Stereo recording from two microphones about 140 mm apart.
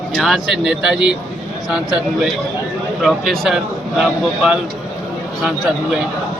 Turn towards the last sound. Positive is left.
turn(degrees=-5)  # may be behind; listen again after turning